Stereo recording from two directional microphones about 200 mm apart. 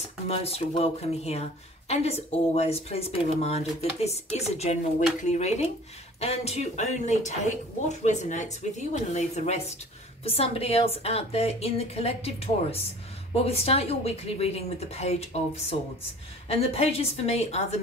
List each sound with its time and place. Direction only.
0.3 s a woman's voice: 30° left (ahead or behind)